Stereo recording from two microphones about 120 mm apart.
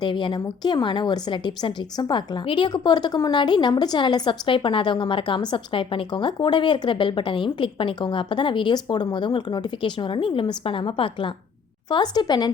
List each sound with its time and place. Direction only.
0.0 s a woman's voice: 40° left (ahead or behind)